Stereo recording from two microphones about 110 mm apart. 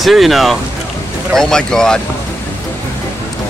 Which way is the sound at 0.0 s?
Centre (ahead or behind).